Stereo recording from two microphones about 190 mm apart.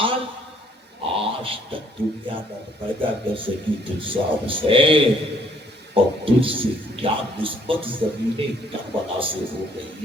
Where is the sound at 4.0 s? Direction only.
25° right (ahead or behind).